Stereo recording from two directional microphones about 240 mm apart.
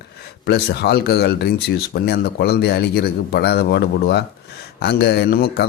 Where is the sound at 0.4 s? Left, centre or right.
Left.